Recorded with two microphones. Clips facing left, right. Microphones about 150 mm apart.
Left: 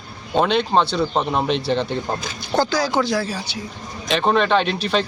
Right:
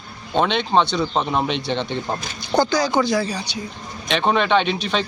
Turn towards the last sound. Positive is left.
turn(degrees=0)  # may be behind; listen again after turning